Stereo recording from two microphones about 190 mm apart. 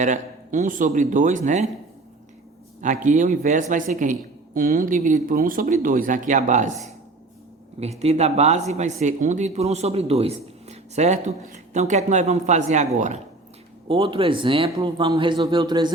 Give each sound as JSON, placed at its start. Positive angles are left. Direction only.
{"t": 0.0, "sound": "speech", "side_deg": -40}
{"t": 2.8, "sound": "speech", "side_deg": -40}
{"t": 7.8, "sound": "speech", "side_deg": -35}